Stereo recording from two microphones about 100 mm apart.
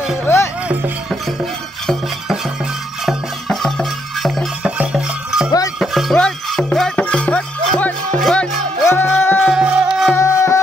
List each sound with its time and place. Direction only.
0.2 s speech: 25° left (ahead or behind)
1.4 s music: centre (ahead or behind)
4.6 s music: 10° right (ahead or behind); by 8.5 s 5° left (ahead or behind)
8.8 s music: 25° left (ahead or behind)
9.5 s music: 10° right (ahead or behind)
10.1 s music: 30° left (ahead or behind)